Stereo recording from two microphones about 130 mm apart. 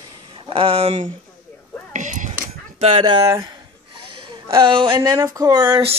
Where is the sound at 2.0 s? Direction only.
70° right (ahead or behind).